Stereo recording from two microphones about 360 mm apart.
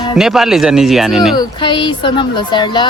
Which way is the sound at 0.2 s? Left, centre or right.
Centre.